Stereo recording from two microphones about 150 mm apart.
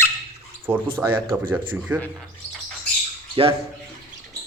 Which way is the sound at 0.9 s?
15° right (ahead or behind).